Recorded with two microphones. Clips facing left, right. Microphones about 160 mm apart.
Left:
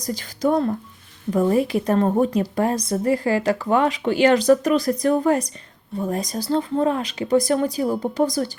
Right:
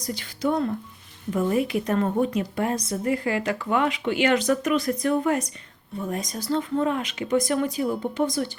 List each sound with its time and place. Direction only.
0.0 s a woman's voice: 40° left (ahead or behind)